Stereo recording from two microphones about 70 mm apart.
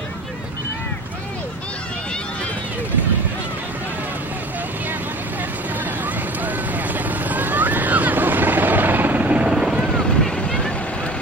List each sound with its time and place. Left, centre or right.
6.0 s vehicle: right; by 9.8 s centre
10.3 s vehicle: centre